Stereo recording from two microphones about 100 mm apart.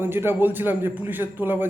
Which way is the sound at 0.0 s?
20° right (ahead or behind).